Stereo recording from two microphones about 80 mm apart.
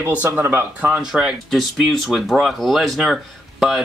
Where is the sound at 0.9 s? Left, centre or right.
Centre.